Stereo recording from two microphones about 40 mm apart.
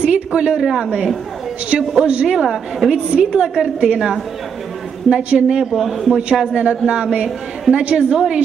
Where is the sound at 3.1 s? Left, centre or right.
Centre.